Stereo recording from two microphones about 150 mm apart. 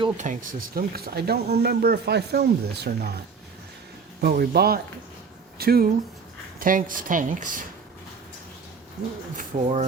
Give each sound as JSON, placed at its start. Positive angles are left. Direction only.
{"t": 0.2, "sound": "speech", "side_deg": -60}
{"t": 4.2, "sound": "speech", "side_deg": -90}
{"t": 6.6, "sound": "speech", "side_deg": -65}
{"t": 9.3, "sound": "speech", "side_deg": -60}